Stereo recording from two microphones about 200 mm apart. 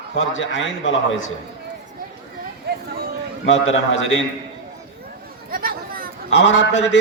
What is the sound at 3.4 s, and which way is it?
Speech, 65° left (ahead or behind).